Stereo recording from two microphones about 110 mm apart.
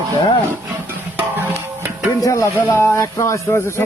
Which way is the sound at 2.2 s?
30° left (ahead or behind).